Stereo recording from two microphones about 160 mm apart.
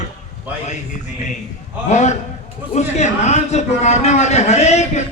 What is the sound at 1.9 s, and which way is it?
Speech, 45° left (ahead or behind).